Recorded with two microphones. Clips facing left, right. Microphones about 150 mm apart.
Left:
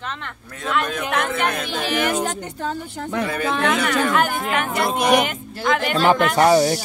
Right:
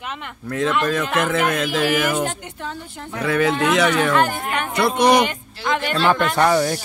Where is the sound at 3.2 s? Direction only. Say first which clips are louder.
Right 9 dB; 90° right.